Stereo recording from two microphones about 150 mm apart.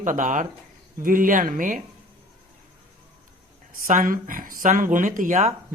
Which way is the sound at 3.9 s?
65° right (ahead or behind).